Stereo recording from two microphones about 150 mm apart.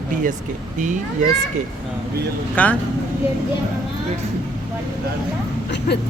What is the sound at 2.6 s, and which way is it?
Speech, 10° left (ahead or behind).